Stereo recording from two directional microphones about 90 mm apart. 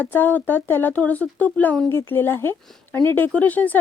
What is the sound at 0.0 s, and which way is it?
A woman's voice, 20° left (ahead or behind).